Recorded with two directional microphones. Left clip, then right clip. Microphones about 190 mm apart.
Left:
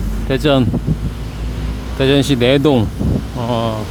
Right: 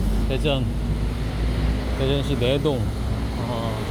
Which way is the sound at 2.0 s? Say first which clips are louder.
Left 11 dB; 45° left (ahead or behind).